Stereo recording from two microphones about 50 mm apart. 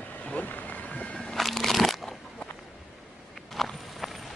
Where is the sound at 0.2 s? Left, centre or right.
Left.